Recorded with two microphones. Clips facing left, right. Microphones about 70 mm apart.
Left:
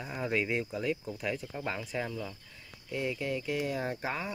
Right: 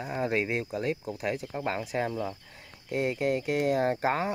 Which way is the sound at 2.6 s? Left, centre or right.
Right.